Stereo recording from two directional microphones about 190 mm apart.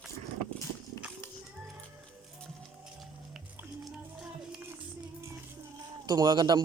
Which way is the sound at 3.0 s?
Centre (ahead or behind).